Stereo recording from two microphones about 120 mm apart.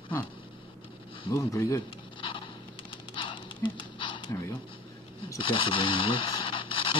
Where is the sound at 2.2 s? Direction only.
45° left (ahead or behind).